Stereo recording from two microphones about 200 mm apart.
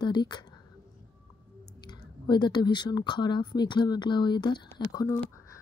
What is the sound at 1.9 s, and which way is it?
Speech, 20° left (ahead or behind).